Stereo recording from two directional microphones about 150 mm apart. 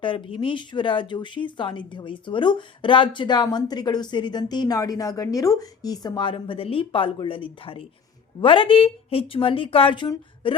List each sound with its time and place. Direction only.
0.0 s speech: 35° left (ahead or behind)